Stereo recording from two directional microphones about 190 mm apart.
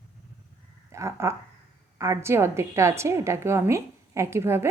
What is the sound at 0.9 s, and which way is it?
A woman's voice, 15° right (ahead or behind).